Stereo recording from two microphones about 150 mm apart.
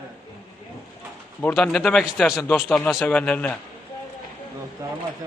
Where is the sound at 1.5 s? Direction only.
5° left (ahead or behind).